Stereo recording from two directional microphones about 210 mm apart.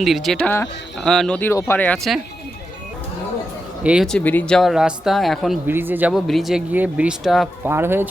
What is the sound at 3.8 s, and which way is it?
Speech, 5° right (ahead or behind).